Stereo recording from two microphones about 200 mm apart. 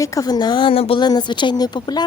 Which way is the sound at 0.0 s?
15° left (ahead or behind).